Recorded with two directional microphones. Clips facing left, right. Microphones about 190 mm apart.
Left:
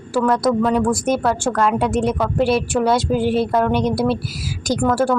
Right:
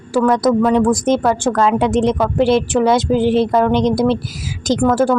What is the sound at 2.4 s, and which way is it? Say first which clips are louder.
Speech: right 4 dB; 20° right (ahead or behind).